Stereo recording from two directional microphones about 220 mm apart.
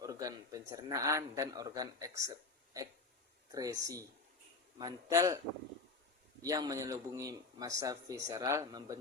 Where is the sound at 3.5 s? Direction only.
15° right (ahead or behind).